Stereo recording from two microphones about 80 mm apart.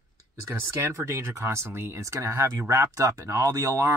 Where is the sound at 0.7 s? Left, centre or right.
Right.